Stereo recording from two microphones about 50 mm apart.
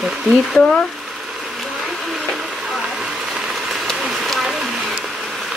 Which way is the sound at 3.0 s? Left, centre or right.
Centre.